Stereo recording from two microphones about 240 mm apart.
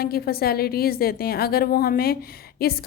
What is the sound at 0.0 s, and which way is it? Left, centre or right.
A woman's voice, left.